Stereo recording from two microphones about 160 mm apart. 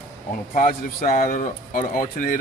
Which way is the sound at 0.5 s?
55° left (ahead or behind).